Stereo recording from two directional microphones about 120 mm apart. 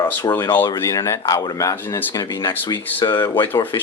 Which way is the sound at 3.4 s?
15° left (ahead or behind).